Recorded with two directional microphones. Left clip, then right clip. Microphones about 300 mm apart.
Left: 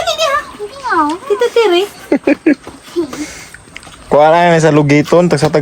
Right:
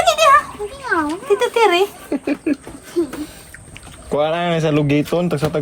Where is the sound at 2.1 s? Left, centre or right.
Centre.